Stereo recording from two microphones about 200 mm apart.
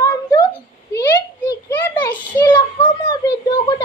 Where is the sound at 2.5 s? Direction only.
25° left (ahead or behind).